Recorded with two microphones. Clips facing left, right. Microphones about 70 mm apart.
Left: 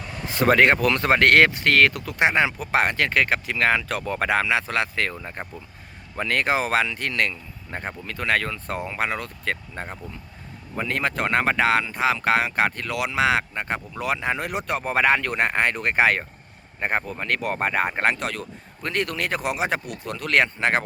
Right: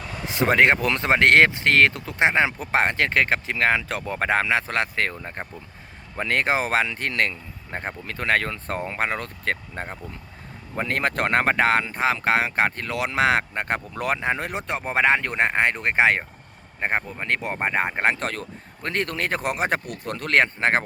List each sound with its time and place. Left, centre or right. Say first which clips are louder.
0.3 s speech: left 1 dB; right
10.0 s speech: even; centre
10.8 s speech: right 1 dB; right
14.2 s speech: even; right
18.2 s speech: even; right